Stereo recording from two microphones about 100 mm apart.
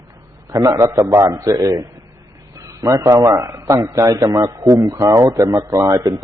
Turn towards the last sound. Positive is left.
turn(degrees=-35)  # may be behind; listen again after turning